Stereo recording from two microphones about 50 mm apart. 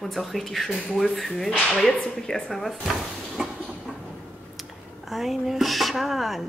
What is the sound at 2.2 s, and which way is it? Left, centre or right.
Speech, centre.